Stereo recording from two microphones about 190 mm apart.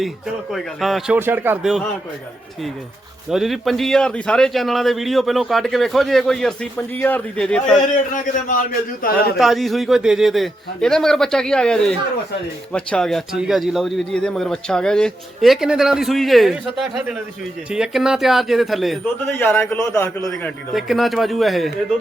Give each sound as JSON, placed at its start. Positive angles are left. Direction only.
{"t": 0.5, "sound": "a man's voice", "side_deg": 0}
{"t": 3.2, "sound": "a man's voice", "side_deg": 0}
{"t": 8.1, "sound": "a man's voice", "side_deg": 45}
{"t": 9.4, "sound": "a man's voice", "side_deg": 0}
{"t": 19.3, "sound": "a man's voice", "side_deg": 10}
{"t": 20.7, "sound": "a man's voice", "side_deg": 0}